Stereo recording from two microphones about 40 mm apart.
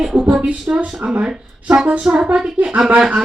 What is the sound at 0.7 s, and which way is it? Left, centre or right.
Speech, right.